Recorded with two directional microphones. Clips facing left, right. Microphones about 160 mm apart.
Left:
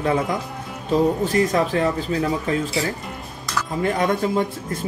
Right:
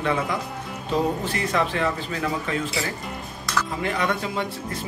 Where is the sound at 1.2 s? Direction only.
40° left (ahead or behind).